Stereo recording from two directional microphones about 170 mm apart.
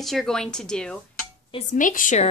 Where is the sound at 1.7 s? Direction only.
50° left (ahead or behind).